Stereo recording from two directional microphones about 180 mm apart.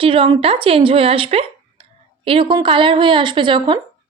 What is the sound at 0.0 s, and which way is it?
A woman's voice, 30° right (ahead or behind).